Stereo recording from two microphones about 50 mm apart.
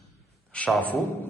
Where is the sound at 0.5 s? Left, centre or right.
Left.